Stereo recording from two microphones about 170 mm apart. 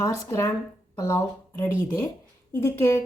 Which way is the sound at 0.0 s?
15° left (ahead or behind).